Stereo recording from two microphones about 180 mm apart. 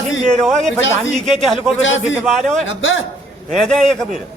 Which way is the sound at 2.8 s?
90° left.